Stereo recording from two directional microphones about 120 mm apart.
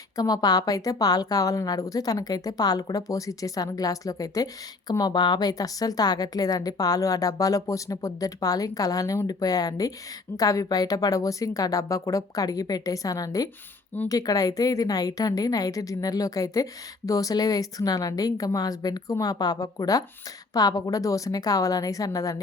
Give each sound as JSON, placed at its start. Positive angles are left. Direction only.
{"t": 0.2, "sound": "a woman's voice", "side_deg": 35}